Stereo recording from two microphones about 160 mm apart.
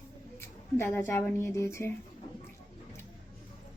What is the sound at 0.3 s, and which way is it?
A woman's voice, 15° left (ahead or behind).